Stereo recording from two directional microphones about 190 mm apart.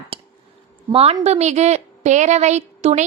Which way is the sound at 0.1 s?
30° right (ahead or behind).